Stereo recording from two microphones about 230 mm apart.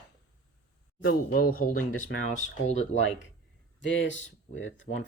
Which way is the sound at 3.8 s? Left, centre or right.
Left.